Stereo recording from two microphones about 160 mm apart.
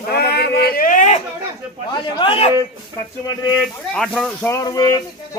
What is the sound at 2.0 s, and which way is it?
Speech, 30° left (ahead or behind).